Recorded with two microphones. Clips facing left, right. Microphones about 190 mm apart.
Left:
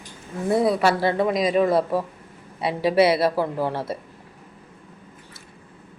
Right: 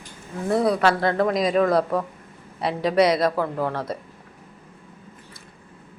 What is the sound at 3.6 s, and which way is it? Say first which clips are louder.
Speech: left 1 dB; 25° left (ahead or behind).